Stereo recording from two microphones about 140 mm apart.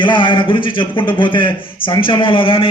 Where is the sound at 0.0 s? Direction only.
35° left (ahead or behind).